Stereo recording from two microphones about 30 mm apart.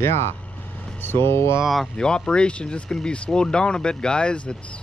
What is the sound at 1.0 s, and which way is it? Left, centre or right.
Speech, left.